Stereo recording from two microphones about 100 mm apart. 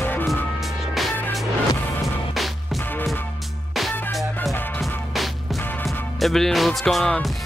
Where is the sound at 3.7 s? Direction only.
Centre (ahead or behind).